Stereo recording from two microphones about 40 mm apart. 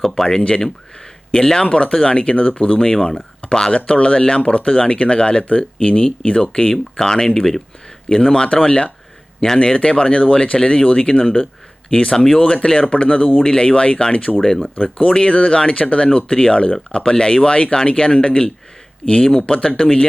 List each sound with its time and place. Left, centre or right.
0.3 s speech: left
13.4 s speech: left
15.1 s speech: left